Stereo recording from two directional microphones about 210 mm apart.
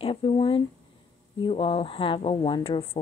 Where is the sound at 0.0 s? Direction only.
25° left (ahead or behind).